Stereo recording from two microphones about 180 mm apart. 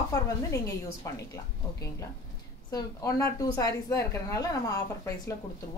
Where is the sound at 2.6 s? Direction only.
20° left (ahead or behind).